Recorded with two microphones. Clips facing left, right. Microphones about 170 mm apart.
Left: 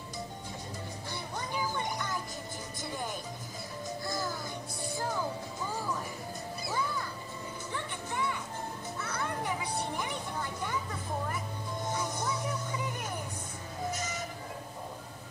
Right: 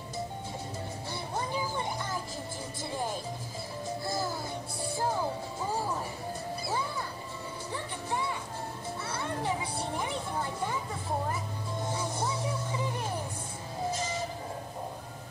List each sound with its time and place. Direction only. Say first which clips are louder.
1.3 s music: right 2 dB; 30° right (ahead or behind)
13.9 s train: right 4 dB; 30° right (ahead or behind)